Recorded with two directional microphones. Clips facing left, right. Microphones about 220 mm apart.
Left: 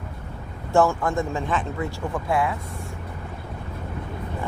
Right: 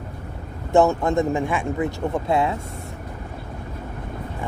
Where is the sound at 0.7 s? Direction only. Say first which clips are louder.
Right 3 dB; 20° right (ahead or behind).